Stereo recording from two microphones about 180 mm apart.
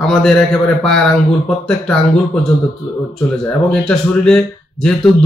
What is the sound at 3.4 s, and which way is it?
Speech, 5° left (ahead or behind).